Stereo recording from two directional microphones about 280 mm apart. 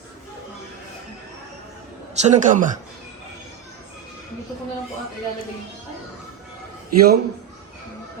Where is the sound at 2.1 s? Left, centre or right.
Right.